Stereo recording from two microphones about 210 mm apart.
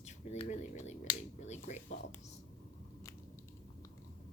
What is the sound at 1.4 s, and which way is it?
Finger snapping, 35° left (ahead or behind).